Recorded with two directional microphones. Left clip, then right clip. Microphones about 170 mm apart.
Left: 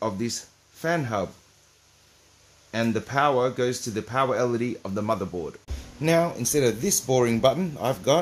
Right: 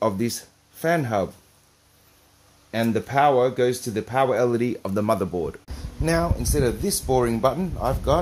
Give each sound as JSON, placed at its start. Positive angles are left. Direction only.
{"t": 0.0, "sound": "speech", "side_deg": -30}
{"t": 2.7, "sound": "speech", "side_deg": -15}
{"t": 6.0, "sound": "speech", "side_deg": 30}